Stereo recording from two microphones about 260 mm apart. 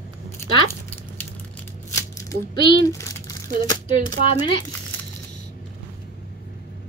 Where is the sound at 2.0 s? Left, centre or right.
Centre.